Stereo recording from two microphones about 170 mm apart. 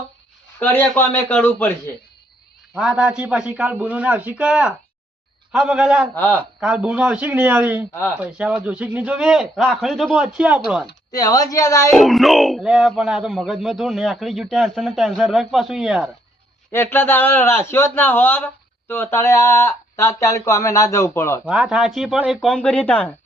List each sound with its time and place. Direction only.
0.6 s speech: 10° left (ahead or behind)
2.7 s a man's voice: 5° right (ahead or behind)
6.1 s speech: 10° left (ahead or behind)
6.6 s a man's voice: 5° right (ahead or behind)
11.1 s speech: 20° left (ahead or behind)
11.9 s speech: centre (ahead or behind)
16.7 s speech: 15° left (ahead or behind)
21.4 s speech: 5° right (ahead or behind)